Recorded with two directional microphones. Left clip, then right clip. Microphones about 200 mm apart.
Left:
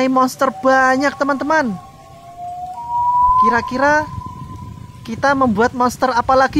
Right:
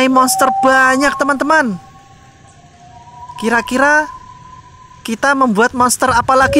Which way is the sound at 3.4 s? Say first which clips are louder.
Right 1 dB; 20° right (ahead or behind).